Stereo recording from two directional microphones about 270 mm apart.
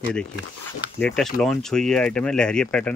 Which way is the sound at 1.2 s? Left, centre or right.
Centre.